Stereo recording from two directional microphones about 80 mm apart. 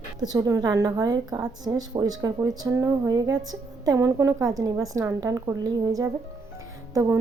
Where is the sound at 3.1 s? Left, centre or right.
Right.